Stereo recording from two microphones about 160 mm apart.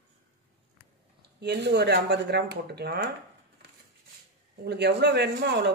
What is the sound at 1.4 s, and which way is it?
Speech, 90° right.